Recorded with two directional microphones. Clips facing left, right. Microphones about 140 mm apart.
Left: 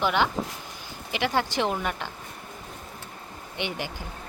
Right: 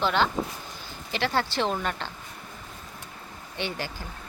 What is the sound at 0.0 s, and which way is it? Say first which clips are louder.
Speech: even; 15° left (ahead or behind).